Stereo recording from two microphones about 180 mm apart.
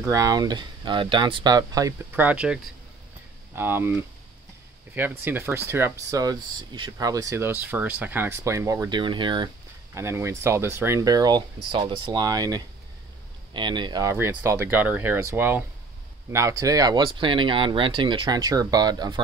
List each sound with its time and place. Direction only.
0.0 s speech: 20° right (ahead or behind)
5.2 s speech: 15° right (ahead or behind)
9.9 s speech: 15° right (ahead or behind)